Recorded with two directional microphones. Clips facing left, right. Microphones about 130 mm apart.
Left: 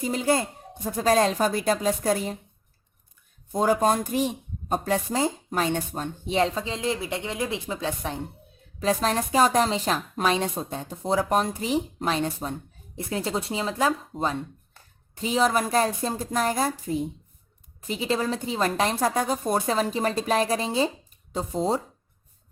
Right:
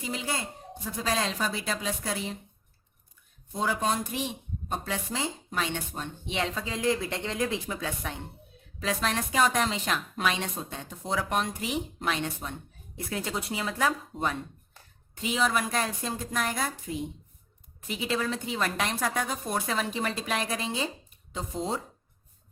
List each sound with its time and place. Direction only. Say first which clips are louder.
0.0 s speech: left 9 dB; 45° left (ahead or behind)
3.5 s speech: left 7 dB; 45° left (ahead or behind)